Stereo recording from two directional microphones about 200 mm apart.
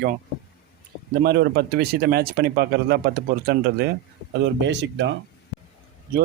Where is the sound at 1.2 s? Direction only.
55° right (ahead or behind).